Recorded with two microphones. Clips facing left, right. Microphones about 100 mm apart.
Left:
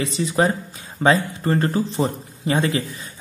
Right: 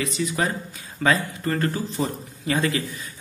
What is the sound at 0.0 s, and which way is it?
Speech, 30° left (ahead or behind).